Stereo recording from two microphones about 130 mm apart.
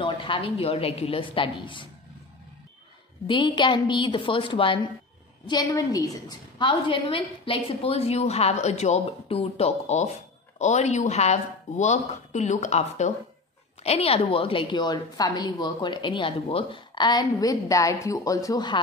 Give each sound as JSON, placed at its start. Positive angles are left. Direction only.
{"t": 0.0, "sound": "a woman's voice", "side_deg": 40}
{"t": 3.3, "sound": "a woman's voice", "side_deg": 35}
{"t": 5.5, "sound": "a woman's voice", "side_deg": 30}
{"t": 13.8, "sound": "a woman's voice", "side_deg": 50}